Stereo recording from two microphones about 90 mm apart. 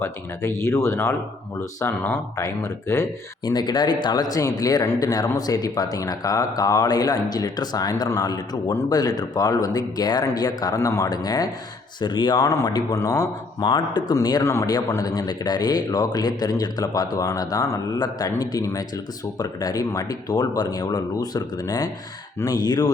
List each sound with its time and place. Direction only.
0.0 s speech: 30° left (ahead or behind)
3.4 s speech: 55° left (ahead or behind)
10.8 s speech: 35° left (ahead or behind)
13.6 s speech: 55° left (ahead or behind)
14.4 s speech: 35° left (ahead or behind)